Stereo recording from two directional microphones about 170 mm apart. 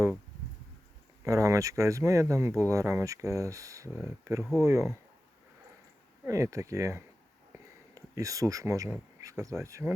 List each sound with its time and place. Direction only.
1.2 s speech: 20° right (ahead or behind)
6.2 s speech: 20° right (ahead or behind)